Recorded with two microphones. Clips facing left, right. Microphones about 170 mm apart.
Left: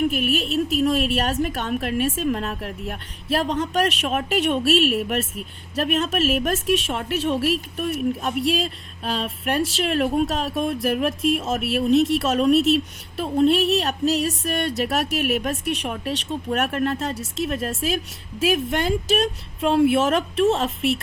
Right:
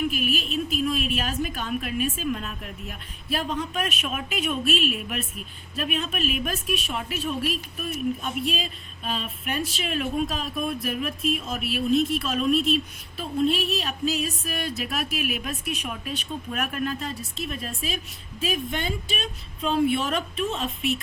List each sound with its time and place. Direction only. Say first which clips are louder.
0.0 s a woman's voice: left 5 dB; 65° left (ahead or behind); by 21.0 s 85° left